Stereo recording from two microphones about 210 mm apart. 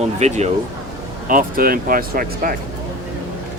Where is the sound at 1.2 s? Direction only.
40° right (ahead or behind).